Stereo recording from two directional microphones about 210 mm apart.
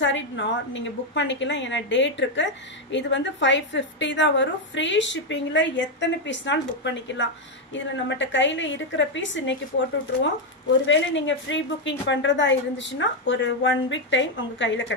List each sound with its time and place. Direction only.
0.0 s a woman's voice: 60° left (ahead or behind)